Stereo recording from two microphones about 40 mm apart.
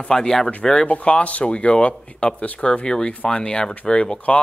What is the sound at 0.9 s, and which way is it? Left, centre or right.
Speech, left.